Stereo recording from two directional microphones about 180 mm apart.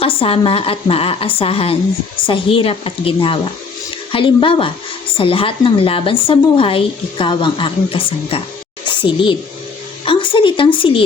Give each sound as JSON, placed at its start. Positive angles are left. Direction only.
{"t": 0.0, "sound": "a woman's voice", "side_deg": 30}